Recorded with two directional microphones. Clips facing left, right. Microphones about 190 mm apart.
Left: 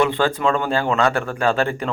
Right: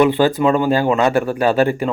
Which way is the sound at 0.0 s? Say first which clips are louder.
Right 5 dB; 15° right (ahead or behind).